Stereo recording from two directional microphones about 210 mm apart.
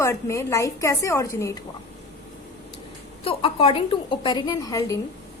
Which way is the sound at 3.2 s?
25° left (ahead or behind).